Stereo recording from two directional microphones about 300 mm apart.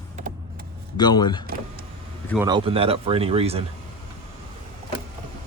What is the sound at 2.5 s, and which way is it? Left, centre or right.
Speech, centre.